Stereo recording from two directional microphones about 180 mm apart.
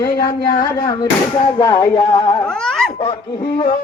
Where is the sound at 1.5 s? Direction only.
20° left (ahead or behind).